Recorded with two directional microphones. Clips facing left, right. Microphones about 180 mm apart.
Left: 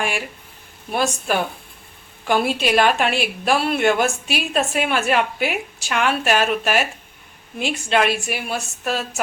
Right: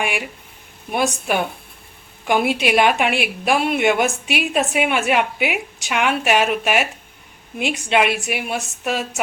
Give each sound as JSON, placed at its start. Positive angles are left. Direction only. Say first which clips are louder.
{"t": 0.0, "sound": "a woman's voice", "louder": "right 1 dB", "side_deg": -10}